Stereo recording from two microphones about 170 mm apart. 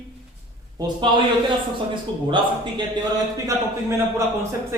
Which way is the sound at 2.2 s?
30° right (ahead or behind).